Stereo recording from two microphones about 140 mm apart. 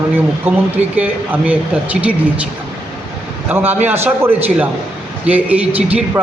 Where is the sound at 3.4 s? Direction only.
15° right (ahead or behind).